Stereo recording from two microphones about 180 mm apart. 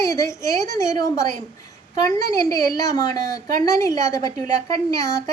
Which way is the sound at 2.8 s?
20° left (ahead or behind).